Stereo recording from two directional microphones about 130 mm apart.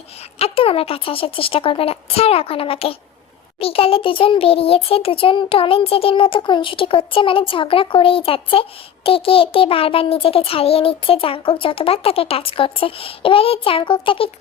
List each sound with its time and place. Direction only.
0.3 s a child's voice: 50° left (ahead or behind)